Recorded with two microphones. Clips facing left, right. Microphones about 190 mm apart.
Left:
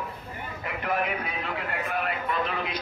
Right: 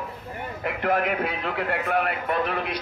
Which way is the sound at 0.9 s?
50° right (ahead or behind).